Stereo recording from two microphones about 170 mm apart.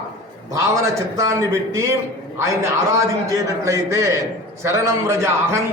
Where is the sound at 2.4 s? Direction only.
15° right (ahead or behind).